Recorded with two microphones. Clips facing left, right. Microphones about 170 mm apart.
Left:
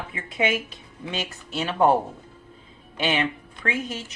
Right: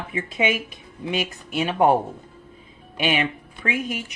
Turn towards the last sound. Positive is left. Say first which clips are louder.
# right 2 dB
turn(degrees=-10)  # may be behind; listen again after turning